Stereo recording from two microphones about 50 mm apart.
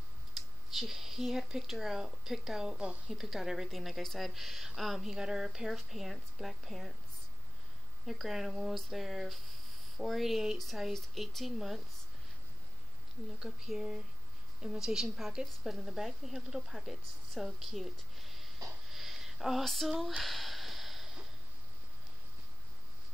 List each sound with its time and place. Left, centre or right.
0.7 s a woman's voice: centre
5.0 s a woman's voice: centre
8.1 s a woman's voice: centre
13.4 s speech: centre
15.7 s speech: centre
17.3 s a sound: centre